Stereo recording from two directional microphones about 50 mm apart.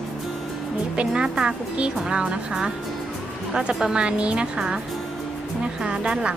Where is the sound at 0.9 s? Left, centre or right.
Centre.